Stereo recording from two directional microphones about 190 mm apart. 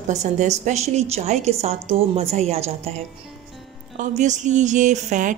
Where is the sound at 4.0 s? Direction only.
40° right (ahead or behind).